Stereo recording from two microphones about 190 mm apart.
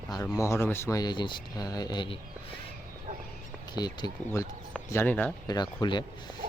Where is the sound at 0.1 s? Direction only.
15° left (ahead or behind).